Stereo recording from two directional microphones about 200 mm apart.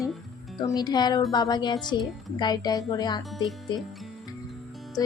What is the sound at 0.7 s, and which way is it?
A woman's voice, 20° left (ahead or behind).